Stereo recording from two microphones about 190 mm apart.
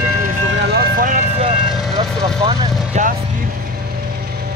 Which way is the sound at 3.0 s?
35° right (ahead or behind).